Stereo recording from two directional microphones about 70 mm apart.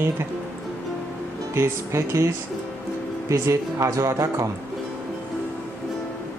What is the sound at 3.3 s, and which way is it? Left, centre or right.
Speech, right.